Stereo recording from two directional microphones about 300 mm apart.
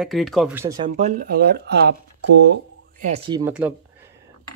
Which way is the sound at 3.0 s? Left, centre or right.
Centre.